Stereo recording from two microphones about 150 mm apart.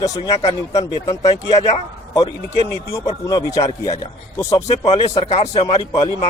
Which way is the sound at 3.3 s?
25° left (ahead or behind).